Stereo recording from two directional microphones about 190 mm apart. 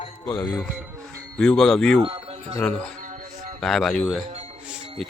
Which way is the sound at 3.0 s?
45° right (ahead or behind).